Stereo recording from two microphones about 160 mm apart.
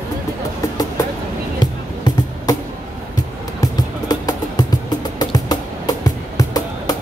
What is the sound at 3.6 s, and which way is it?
Music, 25° left (ahead or behind).